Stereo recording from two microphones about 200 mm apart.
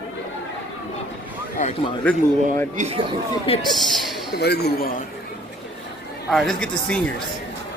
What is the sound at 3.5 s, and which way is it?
Speech, 30° left (ahead or behind).